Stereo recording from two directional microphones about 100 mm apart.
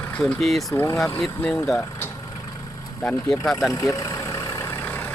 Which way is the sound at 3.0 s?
10° left (ahead or behind).